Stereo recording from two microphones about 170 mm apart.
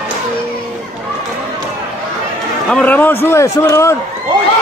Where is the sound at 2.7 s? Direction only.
10° left (ahead or behind).